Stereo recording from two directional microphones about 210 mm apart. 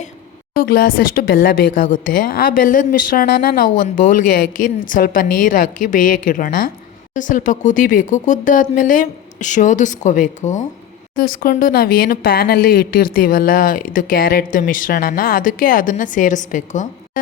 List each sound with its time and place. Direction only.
0.5 s speech: 45° left (ahead or behind)